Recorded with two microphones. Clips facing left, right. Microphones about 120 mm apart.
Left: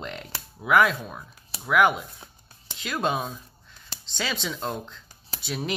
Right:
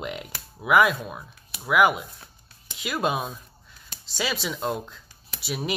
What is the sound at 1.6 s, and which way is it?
Speech, 5° right (ahead or behind).